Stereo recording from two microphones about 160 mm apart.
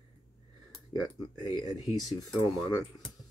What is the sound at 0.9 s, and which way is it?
Speech, 30° left (ahead or behind).